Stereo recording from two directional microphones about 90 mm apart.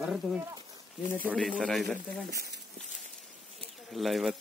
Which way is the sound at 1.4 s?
10° left (ahead or behind).